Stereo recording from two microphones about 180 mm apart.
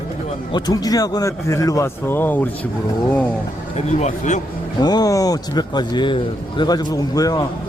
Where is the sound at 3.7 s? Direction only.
40° left (ahead or behind).